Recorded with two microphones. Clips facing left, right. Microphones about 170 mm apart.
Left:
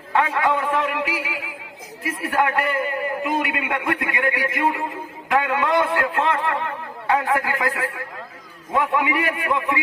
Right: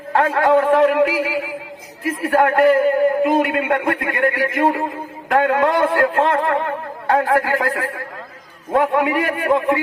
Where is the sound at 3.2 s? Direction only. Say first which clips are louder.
Right 7 dB; 45° right (ahead or behind).